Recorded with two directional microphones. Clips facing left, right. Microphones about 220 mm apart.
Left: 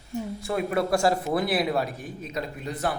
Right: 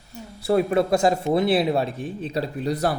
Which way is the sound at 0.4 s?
30° right (ahead or behind).